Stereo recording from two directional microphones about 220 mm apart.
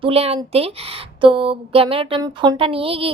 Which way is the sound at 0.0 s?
25° right (ahead or behind).